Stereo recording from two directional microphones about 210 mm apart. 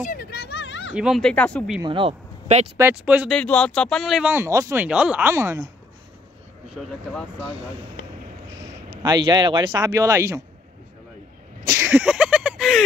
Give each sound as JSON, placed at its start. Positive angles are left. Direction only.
{"t": 0.0, "sound": "a sound", "side_deg": 45}
{"t": 0.9, "sound": "speech", "side_deg": 0}
{"t": 1.8, "sound": "speech", "side_deg": -25}
{"t": 2.8, "sound": "speech", "side_deg": -5}
{"t": 3.3, "sound": "speech", "side_deg": 5}
{"t": 6.7, "sound": "speech", "side_deg": 0}
{"t": 9.0, "sound": "speech", "side_deg": -20}
{"t": 11.6, "sound": "a sound", "side_deg": -10}